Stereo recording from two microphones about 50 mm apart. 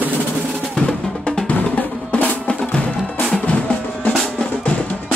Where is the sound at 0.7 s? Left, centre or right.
Centre.